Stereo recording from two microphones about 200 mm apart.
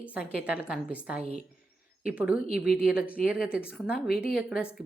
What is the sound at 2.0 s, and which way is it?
A woman's voice, 5° right (ahead or behind).